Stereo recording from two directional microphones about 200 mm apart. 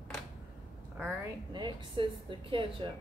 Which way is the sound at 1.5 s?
25° right (ahead or behind).